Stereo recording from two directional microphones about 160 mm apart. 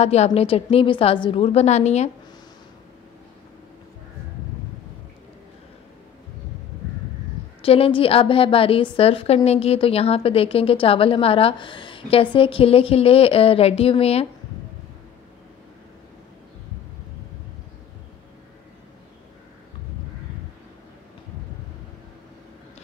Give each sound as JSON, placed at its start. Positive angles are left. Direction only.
{"t": 0.0, "sound": "a woman's voice", "side_deg": 40}
{"t": 7.6, "sound": "a woman's voice", "side_deg": 35}